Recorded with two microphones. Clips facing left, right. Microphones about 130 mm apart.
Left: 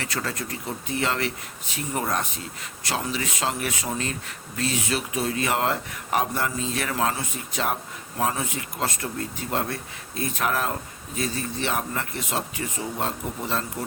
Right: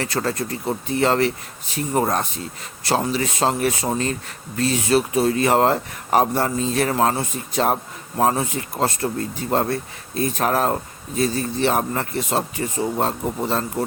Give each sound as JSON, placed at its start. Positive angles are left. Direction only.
{"t": 0.0, "sound": "speech", "side_deg": -35}